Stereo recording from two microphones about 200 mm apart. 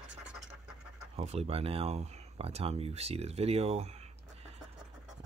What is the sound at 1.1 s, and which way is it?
Speech, 30° right (ahead or behind).